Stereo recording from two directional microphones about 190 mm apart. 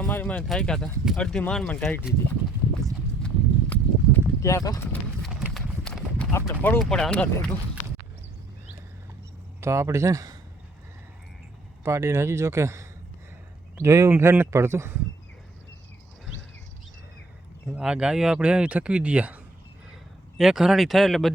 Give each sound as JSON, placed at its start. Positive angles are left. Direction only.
{"t": 0.0, "sound": "speech", "side_deg": 10}
{"t": 2.8, "sound": "clip-clop", "side_deg": 5}
{"t": 5.4, "sound": "clip-clop", "side_deg": 0}
{"t": 6.5, "sound": "speech", "side_deg": 10}
{"t": 9.6, "sound": "speech", "side_deg": -15}
{"t": 11.9, "sound": "speech", "side_deg": -15}
{"t": 17.7, "sound": "speech", "side_deg": -5}
{"t": 20.4, "sound": "speech", "side_deg": 0}